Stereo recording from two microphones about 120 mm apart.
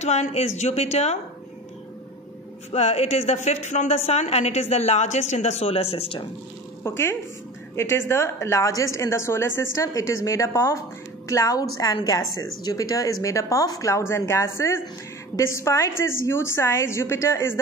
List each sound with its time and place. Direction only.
0.0 s a woman's voice: 70° left (ahead or behind)
2.7 s a woman's voice: 65° left (ahead or behind)
6.8 s a woman's voice: 20° left (ahead or behind)